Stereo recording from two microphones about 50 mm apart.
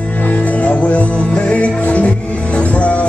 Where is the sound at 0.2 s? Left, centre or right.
Left.